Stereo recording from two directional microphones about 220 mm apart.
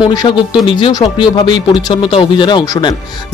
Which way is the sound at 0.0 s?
20° left (ahead or behind).